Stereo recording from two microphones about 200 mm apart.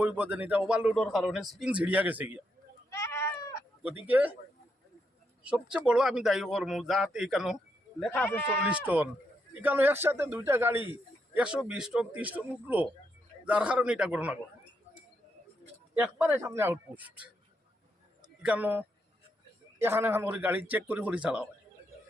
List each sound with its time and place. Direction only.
0.0 s speech: 5° right (ahead or behind)
2.9 s goat: 15° left (ahead or behind)
4.0 s speech: 10° right (ahead or behind)
5.4 s speech: 5° right (ahead or behind)
8.7 s speech: 10° right (ahead or behind)
16.0 s speech: 10° right (ahead or behind)
18.4 s speech: 10° right (ahead or behind)